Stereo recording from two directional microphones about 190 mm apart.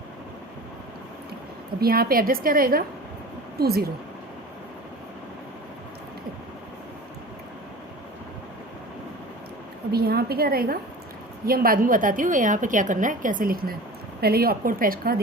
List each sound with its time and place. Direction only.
1.8 s a woman's voice: 50° right (ahead or behind)
9.9 s a woman's voice: 55° right (ahead or behind)